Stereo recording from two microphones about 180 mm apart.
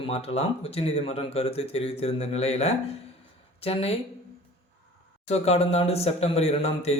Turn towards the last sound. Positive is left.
turn(degrees=35)  # may be behind; listen again after turning